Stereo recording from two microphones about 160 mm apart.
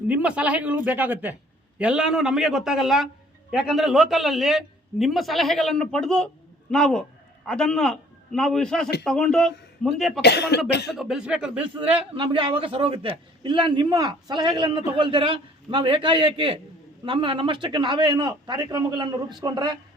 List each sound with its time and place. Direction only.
0.1 s a man's voice: 10° right (ahead or behind)
10.2 s speech: 90° left
10.9 s a man's voice: centre (ahead or behind)
11.9 s a man's voice: 35° right (ahead or behind)